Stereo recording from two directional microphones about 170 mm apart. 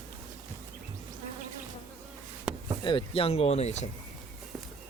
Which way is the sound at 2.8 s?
30° left (ahead or behind).